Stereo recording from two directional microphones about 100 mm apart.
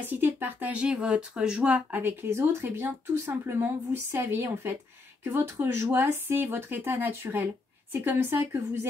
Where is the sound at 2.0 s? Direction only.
25° right (ahead or behind).